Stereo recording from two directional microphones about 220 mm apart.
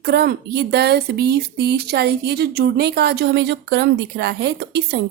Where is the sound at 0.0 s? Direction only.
45° right (ahead or behind).